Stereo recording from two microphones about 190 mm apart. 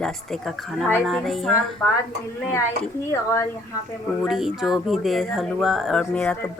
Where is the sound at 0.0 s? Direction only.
Centre (ahead or behind).